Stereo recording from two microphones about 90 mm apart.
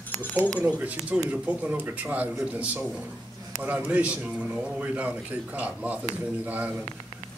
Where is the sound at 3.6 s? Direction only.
15° right (ahead or behind).